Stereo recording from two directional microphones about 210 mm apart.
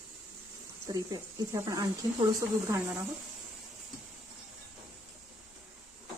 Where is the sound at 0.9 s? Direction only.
15° right (ahead or behind).